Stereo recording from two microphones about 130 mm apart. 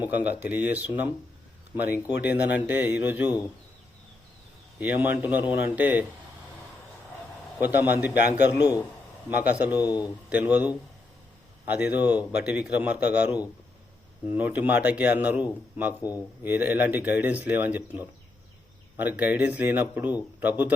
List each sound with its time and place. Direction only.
0.0 s a man's voice: 15° right (ahead or behind)
4.8 s a man's voice: 15° right (ahead or behind)
7.6 s a man's voice: 15° right (ahead or behind)
9.7 s a man's voice: 30° left (ahead or behind)
10.2 s a man's voice: 10° right (ahead or behind)
16.0 s speech: 30° left (ahead or behind)
16.4 s a man's voice: 15° right (ahead or behind)